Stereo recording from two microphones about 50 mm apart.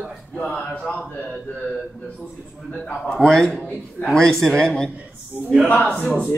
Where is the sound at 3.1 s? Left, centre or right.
Centre.